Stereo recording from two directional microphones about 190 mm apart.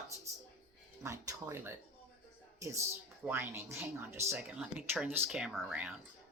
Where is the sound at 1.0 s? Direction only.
15° right (ahead or behind).